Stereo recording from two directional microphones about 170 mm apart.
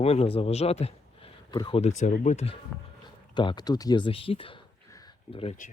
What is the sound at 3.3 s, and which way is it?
Speech, 25° left (ahead or behind).